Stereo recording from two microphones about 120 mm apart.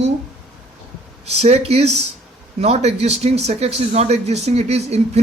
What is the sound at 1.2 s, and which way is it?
Speech, 60° right (ahead or behind).